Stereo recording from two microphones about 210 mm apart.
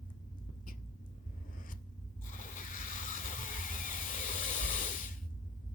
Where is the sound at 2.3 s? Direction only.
40° left (ahead or behind).